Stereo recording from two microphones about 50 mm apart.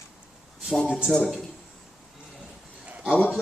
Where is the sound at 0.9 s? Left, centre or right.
Centre.